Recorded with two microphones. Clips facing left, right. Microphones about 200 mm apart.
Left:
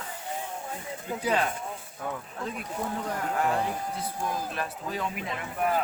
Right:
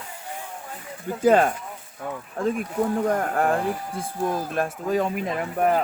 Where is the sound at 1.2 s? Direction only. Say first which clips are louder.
Right 10 dB; 45° right (ahead or behind).